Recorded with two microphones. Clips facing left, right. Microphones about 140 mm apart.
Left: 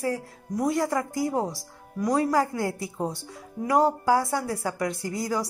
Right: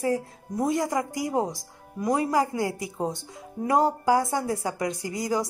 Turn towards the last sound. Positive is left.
turn(degrees=-20)  # may be behind; listen again after turning